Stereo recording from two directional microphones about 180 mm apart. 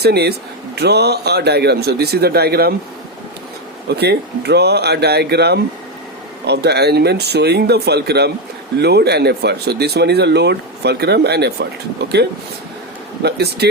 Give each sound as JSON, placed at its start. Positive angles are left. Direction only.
{"t": 0.0, "sound": "speech", "side_deg": -65}
{"t": 3.8, "sound": "speech", "side_deg": -65}
{"t": 13.2, "sound": "speech", "side_deg": -65}